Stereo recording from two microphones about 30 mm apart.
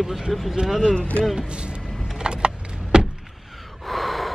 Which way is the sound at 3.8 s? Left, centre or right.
Centre.